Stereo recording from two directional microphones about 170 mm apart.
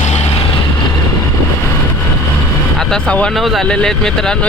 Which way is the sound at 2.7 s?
5° left (ahead or behind).